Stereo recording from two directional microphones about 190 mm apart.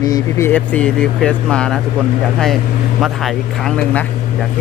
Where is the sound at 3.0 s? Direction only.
Centre (ahead or behind).